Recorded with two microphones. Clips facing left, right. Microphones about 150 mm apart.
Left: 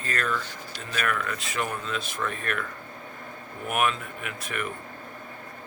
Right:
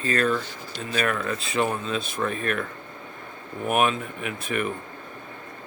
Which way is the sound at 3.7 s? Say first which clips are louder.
Right 4 dB; 25° right (ahead or behind).